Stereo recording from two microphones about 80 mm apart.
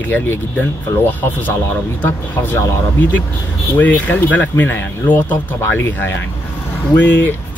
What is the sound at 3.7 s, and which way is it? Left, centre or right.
Speech, centre.